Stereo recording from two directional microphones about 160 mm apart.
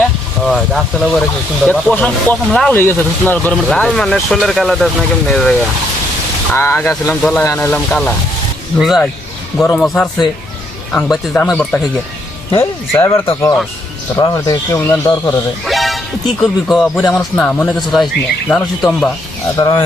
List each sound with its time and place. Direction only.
0.4 s speech: centre (ahead or behind)
6.5 s speech: 15° left (ahead or behind)
12.5 s speech: 15° left (ahead or behind)
15.6 s speech: centre (ahead or behind)
19.5 s speech: 25° left (ahead or behind)